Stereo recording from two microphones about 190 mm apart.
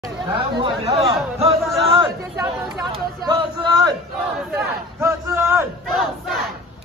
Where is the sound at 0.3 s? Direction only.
25° right (ahead or behind).